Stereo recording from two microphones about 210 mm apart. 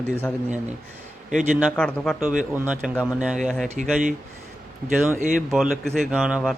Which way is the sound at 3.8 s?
40° right (ahead or behind).